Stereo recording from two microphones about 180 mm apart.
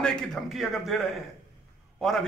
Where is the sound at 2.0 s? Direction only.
Centre (ahead or behind).